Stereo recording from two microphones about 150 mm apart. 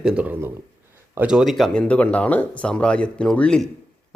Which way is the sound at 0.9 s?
15° right (ahead or behind).